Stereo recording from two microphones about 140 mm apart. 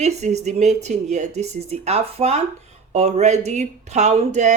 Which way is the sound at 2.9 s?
55° right (ahead or behind).